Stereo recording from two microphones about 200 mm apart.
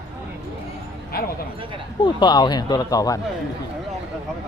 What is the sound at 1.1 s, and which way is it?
Speech, 50° left (ahead or behind).